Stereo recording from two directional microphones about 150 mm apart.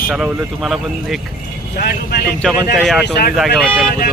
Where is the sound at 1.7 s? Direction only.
85° left.